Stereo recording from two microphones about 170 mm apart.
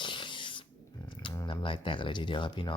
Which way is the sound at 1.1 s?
30° left (ahead or behind).